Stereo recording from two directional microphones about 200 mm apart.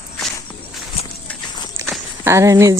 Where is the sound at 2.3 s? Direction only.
15° right (ahead or behind).